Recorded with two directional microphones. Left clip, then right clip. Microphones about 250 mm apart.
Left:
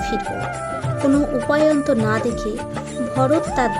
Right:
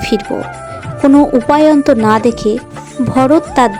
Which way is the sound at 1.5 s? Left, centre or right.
Right.